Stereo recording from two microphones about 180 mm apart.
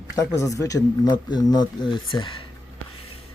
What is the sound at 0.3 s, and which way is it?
Speech, 15° left (ahead or behind).